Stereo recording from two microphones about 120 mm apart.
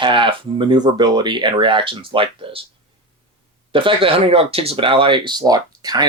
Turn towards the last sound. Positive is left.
turn(degrees=-30)  # may be behind; listen again after turning